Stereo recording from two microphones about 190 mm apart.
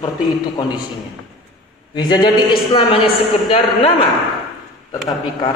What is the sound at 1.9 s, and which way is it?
A woman's voice, 25° left (ahead or behind).